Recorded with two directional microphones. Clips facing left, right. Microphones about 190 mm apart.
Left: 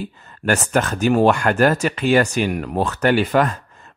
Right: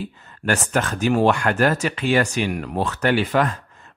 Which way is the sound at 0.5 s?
40° left (ahead or behind).